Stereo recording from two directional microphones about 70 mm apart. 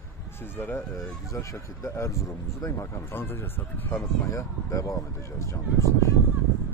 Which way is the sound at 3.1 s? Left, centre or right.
Left.